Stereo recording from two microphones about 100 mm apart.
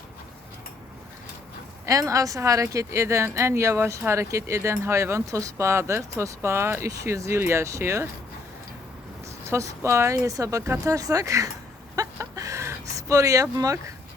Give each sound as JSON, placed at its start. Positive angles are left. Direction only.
{"t": 1.9, "sound": "speech", "side_deg": -35}
{"t": 9.5, "sound": "speech", "side_deg": -30}
{"t": 11.9, "sound": "a sound", "side_deg": -35}